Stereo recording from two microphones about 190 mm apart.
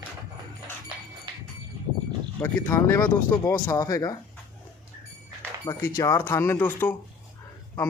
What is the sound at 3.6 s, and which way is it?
Speech, 20° left (ahead or behind).